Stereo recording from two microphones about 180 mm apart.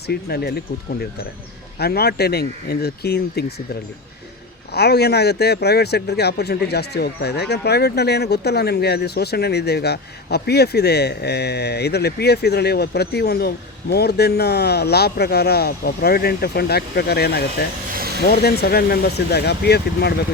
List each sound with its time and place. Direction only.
0.1 s a man's voice: 60° left (ahead or behind)
1.8 s a man's voice: 60° left (ahead or behind)
4.7 s a man's voice: 65° left (ahead or behind)
17.9 s vehicle: 60° right (ahead or behind)
18.2 s a man's voice: 60° left (ahead or behind)